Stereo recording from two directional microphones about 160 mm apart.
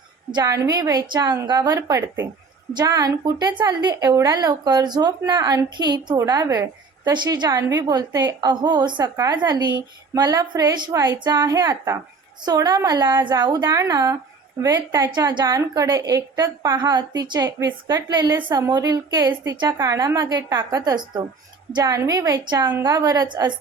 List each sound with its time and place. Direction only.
0.3 s a woman's voice: 25° right (ahead or behind)